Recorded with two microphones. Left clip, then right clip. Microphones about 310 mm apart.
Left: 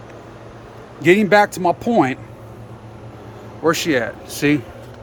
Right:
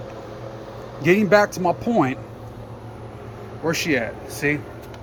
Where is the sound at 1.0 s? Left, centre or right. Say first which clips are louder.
Left 3 dB; centre.